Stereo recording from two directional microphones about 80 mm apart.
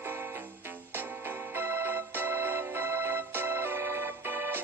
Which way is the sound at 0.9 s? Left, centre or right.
Right.